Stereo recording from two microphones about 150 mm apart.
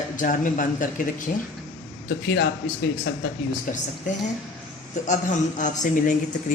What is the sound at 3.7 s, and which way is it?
Speech, 65° left (ahead or behind).